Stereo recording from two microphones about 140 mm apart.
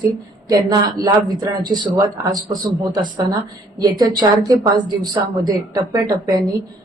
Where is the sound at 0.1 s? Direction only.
25° right (ahead or behind).